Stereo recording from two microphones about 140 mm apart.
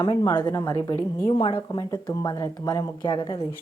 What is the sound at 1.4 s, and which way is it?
Speech, 40° left (ahead or behind).